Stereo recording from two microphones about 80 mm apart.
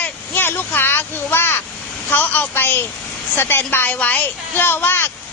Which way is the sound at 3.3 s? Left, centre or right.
Left.